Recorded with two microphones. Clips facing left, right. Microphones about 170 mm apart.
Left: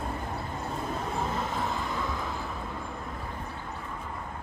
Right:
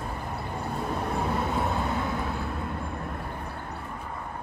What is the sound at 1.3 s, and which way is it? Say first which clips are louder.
Train: right 4 dB; 65° right (ahead or behind).